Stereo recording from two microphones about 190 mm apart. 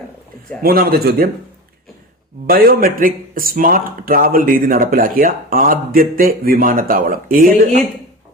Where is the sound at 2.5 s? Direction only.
50° right (ahead or behind).